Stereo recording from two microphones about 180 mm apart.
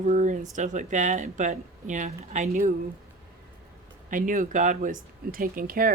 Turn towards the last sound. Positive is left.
turn(degrees=-50)  # may be behind; listen again after turning